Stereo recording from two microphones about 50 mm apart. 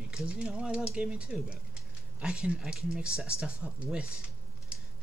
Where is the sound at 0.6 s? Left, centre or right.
Right.